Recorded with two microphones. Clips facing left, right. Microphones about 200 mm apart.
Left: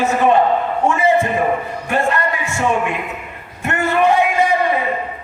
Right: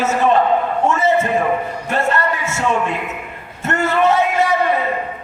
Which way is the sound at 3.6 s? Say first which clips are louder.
Even; 15° left (ahead or behind).